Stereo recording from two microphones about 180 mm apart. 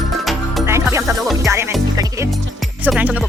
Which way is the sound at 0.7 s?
15° right (ahead or behind).